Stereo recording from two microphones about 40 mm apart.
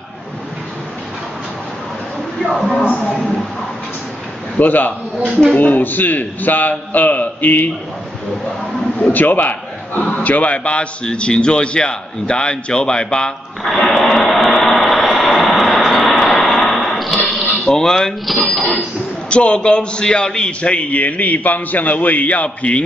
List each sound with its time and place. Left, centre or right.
2.7 s speech: left
3.0 s a man's voice: centre
4.6 s a man's voice: left
5.3 s speech: centre
5.6 s a man's voice: left
9.1 s a man's voice: left
13.8 s vehicle: centre
17.7 s speech: centre
18.2 s speech: centre
18.6 s a man's voice: left